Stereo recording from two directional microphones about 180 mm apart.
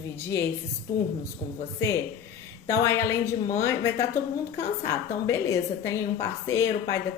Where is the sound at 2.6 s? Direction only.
15° left (ahead or behind).